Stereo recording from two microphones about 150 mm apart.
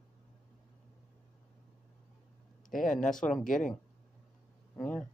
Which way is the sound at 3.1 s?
5° left (ahead or behind).